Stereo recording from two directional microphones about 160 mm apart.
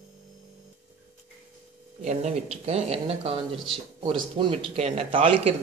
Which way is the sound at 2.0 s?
45° right (ahead or behind).